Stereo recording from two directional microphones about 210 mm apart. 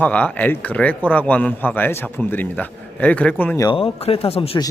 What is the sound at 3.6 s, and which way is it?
Speech, 25° left (ahead or behind).